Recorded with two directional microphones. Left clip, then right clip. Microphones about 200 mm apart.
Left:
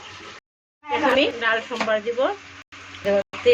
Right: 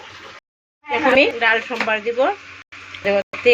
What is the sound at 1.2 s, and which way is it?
Speech, 15° right (ahead or behind).